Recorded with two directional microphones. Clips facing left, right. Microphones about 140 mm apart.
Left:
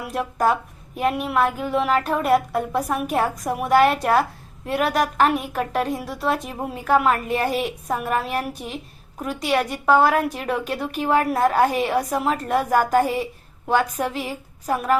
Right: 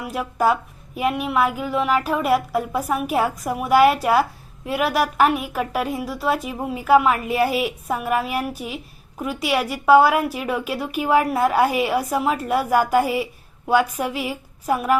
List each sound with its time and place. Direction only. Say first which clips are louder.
0.0 s a woman's voice: right 1 dB; centre (ahead or behind)